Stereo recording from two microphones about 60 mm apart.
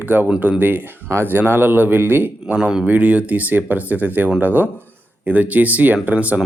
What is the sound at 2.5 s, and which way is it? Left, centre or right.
Speech, centre.